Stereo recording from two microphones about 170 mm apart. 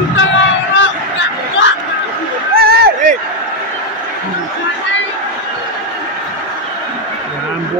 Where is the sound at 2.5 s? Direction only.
65° right (ahead or behind).